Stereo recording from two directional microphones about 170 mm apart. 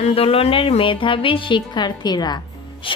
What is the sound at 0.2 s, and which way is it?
A woman's voice, 35° left (ahead or behind).